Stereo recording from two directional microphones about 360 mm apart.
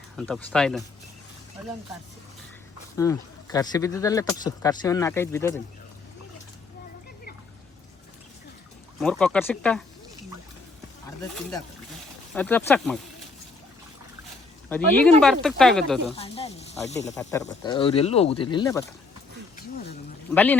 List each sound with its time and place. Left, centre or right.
0.2 s speech: centre
3.0 s speech: centre
9.0 s speech: centre
12.3 s speech: centre
14.7 s speech: centre
16.1 s speech: centre
20.3 s speech: centre